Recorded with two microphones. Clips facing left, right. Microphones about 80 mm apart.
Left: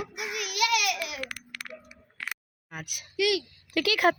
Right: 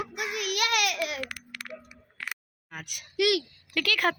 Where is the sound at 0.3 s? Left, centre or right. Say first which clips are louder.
Left 1 dB; right.